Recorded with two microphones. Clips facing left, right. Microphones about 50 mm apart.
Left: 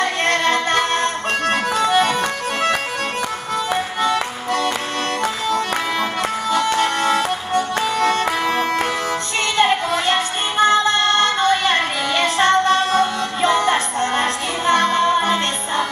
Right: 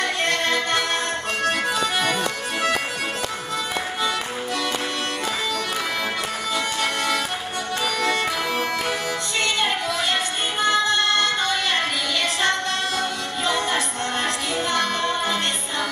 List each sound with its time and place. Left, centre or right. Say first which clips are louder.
0.0 s music: left 5 dB; left
4.0 s music: left 5 dB; left
6.5 s music: left 7 dB; left